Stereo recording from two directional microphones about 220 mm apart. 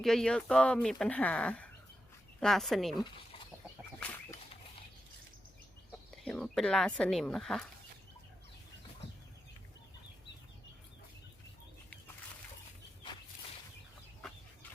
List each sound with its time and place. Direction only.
0.0 s speech: centre (ahead or behind)
2.9 s speech: 20° left (ahead or behind)
6.2 s speech: 5° left (ahead or behind)